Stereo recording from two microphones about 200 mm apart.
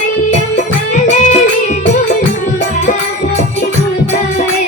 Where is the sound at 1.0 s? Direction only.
35° left (ahead or behind).